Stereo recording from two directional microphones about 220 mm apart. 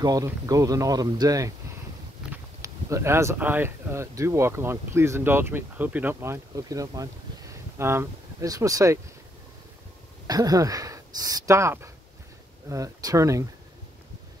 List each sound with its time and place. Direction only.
0.0 s speech: 15° right (ahead or behind)
2.6 s speech: 15° right (ahead or behind)
10.2 s speech: 15° right (ahead or behind)